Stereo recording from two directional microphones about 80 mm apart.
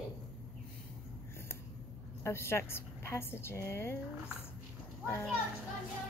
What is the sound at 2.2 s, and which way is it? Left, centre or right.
A woman's voice, left.